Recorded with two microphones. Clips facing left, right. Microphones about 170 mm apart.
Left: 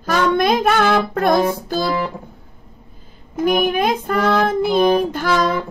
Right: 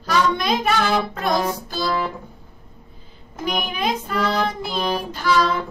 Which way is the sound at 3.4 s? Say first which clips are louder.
Left 7 dB; 50° left (ahead or behind).